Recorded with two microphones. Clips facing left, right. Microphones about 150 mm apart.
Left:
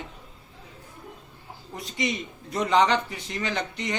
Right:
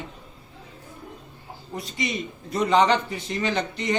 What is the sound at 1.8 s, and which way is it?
Speech, 20° left (ahead or behind).